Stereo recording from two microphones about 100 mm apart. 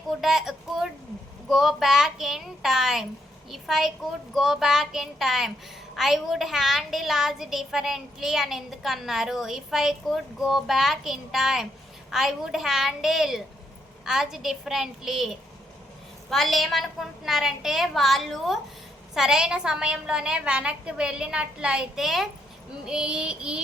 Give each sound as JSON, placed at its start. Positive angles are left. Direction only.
{"t": 0.2, "sound": "a woman's voice", "side_deg": -5}